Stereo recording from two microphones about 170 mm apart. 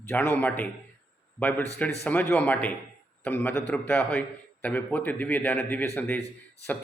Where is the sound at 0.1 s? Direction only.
10° left (ahead or behind).